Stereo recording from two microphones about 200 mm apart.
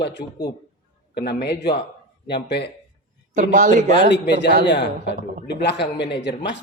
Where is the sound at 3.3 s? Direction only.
40° right (ahead or behind).